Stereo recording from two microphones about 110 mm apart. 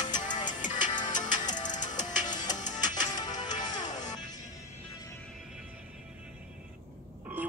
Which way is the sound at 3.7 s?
90° left.